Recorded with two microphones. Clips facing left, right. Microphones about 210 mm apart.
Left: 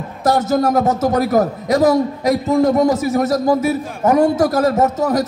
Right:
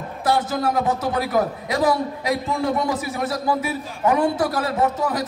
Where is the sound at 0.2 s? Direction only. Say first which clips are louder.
Left 6 dB; 45° left (ahead or behind).